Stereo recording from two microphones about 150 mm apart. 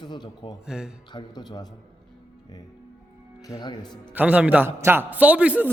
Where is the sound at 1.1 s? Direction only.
30° left (ahead or behind).